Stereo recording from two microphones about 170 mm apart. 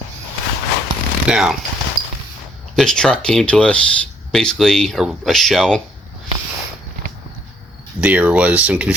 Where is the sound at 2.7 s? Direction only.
5° left (ahead or behind).